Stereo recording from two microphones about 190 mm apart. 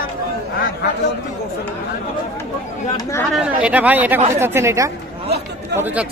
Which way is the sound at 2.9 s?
15° left (ahead or behind).